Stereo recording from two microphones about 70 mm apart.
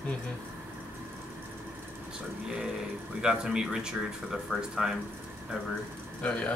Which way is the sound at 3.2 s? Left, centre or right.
Centre.